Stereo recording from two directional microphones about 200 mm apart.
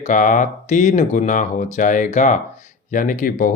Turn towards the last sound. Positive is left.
turn(degrees=45)  # may be behind; listen again after turning